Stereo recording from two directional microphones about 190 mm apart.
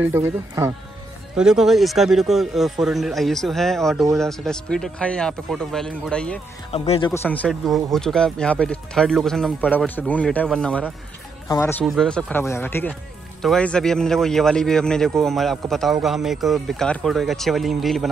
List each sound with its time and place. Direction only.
0.1 s speech: 15° right (ahead or behind)
1.3 s speech: 5° right (ahead or behind)
6.7 s speech: 30° left (ahead or behind)
7.1 s speech: 5° left (ahead or behind)
11.8 s speech: centre (ahead or behind)